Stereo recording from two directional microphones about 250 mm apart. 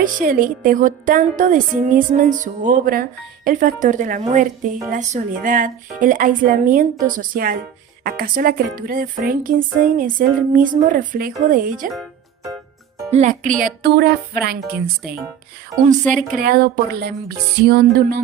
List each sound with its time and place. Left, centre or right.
0.0 s a woman's voice: right
13.1 s a woman's voice: right
16.3 s a woman's voice: right